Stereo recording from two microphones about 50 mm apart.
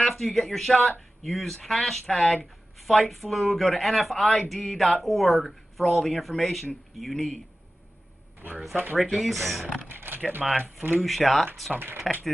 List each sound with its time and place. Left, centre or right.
0.0 s speech: centre
9.1 s speech: centre
9.8 s speech: right
11.1 s speech: centre
11.7 s speech: right